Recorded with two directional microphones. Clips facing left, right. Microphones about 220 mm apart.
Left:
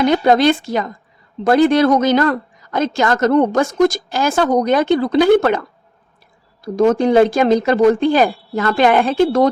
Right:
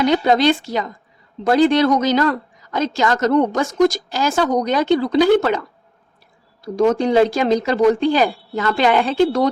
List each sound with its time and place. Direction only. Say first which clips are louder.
0.0 s a woman's voice: left 2 dB; 50° left (ahead or behind)
6.7 s a woman's voice: left 3 dB; 50° left (ahead or behind)